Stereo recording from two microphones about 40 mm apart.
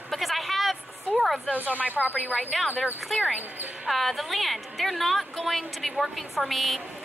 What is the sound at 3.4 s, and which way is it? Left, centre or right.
Speech, right.